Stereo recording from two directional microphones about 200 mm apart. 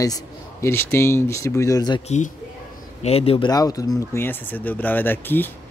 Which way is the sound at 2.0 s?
35° left (ahead or behind).